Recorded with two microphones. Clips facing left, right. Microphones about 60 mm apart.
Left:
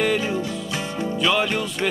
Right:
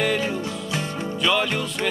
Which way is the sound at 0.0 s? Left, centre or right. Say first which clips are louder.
Left 1 dB; centre.